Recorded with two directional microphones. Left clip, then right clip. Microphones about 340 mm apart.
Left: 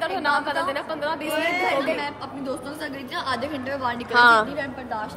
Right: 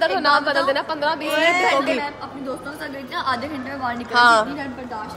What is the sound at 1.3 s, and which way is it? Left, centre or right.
Speech, right.